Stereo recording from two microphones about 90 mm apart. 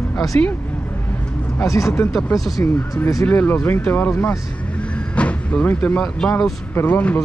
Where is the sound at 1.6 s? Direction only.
35° left (ahead or behind).